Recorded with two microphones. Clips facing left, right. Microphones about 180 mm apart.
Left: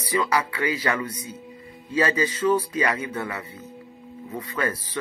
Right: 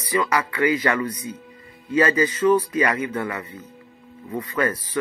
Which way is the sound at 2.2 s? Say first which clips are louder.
Right 4 dB; 10° left (ahead or behind).